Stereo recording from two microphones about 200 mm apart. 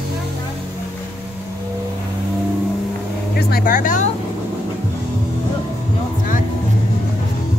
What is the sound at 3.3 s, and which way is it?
Speech, 50° left (ahead or behind).